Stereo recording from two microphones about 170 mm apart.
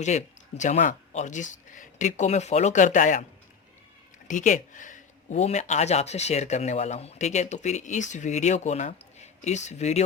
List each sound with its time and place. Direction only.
0.0 s speech: 45° left (ahead or behind)
4.3 s speech: 50° left (ahead or behind)